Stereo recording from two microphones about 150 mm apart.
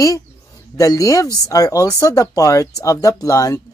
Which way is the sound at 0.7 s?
20° left (ahead or behind).